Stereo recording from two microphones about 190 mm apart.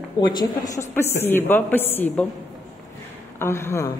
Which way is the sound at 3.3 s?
15° left (ahead or behind).